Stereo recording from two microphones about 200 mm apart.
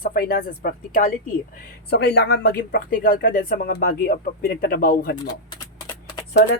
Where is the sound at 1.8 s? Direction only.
55° left (ahead or behind).